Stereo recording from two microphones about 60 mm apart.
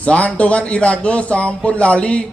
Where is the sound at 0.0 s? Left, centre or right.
Left.